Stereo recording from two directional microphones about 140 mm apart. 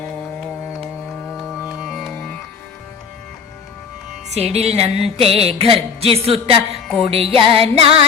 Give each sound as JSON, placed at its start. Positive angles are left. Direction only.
{"t": 1.8, "sound": "music", "side_deg": 0}
{"t": 4.3, "sound": "music", "side_deg": -50}